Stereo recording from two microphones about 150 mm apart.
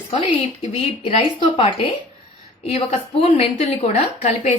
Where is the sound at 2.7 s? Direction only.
40° left (ahead or behind).